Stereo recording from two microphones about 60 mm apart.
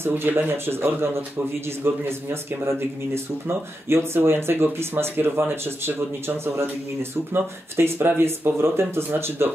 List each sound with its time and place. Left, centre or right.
0.1 s speech: right